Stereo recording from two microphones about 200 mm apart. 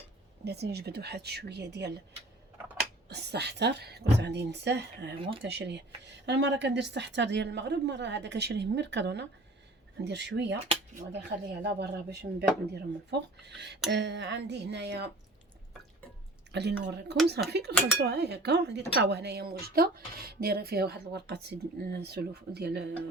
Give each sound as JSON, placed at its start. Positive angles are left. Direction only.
{"t": 0.4, "sound": "a woman's voice", "side_deg": -55}
{"t": 3.1, "sound": "a woman's voice", "side_deg": -55}
{"t": 11.6, "sound": "a woman's voice", "side_deg": -55}
{"t": 16.5, "sound": "a woman's voice", "side_deg": -55}